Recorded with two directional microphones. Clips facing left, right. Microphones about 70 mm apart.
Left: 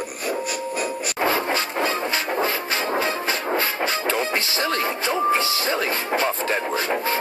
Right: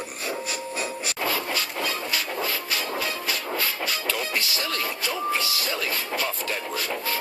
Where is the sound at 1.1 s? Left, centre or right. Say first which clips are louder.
Left 7 dB; left.